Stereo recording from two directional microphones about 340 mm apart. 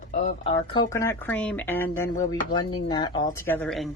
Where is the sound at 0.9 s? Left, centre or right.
Centre.